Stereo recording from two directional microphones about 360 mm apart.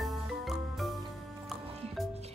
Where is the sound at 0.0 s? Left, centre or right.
Centre.